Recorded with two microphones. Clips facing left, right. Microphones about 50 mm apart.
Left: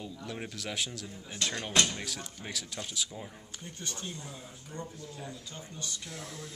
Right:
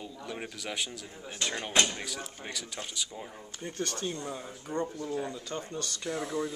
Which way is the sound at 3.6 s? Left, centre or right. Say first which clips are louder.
Right 8 dB; right.